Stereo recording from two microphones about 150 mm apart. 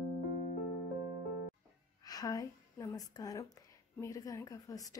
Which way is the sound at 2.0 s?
25° left (ahead or behind).